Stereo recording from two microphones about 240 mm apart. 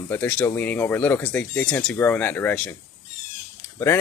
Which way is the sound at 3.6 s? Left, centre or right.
Centre.